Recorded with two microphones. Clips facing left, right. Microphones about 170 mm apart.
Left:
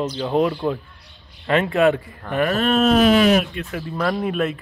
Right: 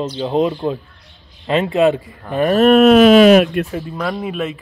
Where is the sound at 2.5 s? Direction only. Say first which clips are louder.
Right 9 dB; 60° right (ahead or behind); by 3.6 s 85° right.